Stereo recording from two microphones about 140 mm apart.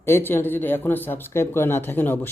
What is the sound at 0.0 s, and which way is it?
Speech, 15° left (ahead or behind).